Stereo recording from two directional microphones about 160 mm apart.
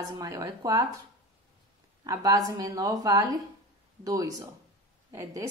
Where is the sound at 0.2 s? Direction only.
20° right (ahead or behind).